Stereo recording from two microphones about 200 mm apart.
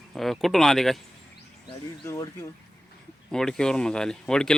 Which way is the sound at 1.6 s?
15° left (ahead or behind).